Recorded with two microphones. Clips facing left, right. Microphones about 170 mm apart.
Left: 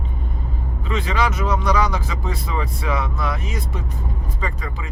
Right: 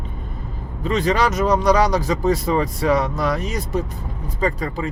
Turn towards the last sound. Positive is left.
turn(degrees=-35)  # may be behind; listen again after turning